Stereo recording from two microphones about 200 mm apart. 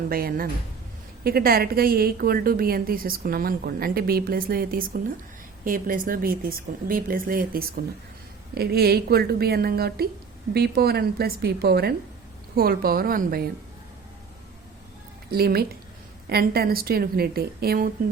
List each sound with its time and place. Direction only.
0.1 s a woman's voice: 45° right (ahead or behind)
15.3 s a woman's voice: 50° right (ahead or behind)